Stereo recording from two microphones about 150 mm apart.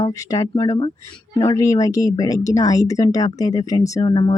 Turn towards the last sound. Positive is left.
turn(degrees=30)  # may be behind; listen again after turning